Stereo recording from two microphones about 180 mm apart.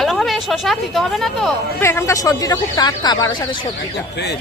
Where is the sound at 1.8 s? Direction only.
15° left (ahead or behind).